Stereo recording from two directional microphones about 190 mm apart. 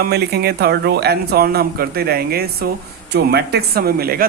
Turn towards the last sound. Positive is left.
turn(degrees=-55)  # may be behind; listen again after turning